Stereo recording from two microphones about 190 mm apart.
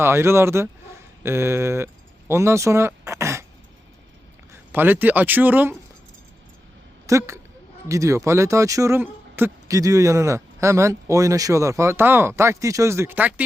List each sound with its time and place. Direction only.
0.0 s speech: 15° right (ahead or behind)
4.7 s speech: 10° right (ahead or behind)
7.1 s speech: 15° right (ahead or behind)